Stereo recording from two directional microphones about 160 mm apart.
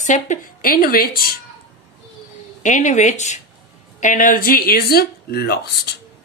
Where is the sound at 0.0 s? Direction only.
50° left (ahead or behind); by 1.2 s 70° left (ahead or behind).